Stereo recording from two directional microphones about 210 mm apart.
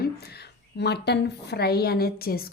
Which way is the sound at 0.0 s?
50° left (ahead or behind).